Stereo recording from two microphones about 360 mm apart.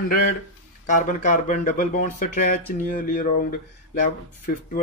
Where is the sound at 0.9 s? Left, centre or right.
Left.